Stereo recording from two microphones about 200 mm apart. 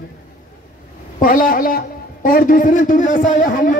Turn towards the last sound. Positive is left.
turn(degrees=40)  # may be behind; listen again after turning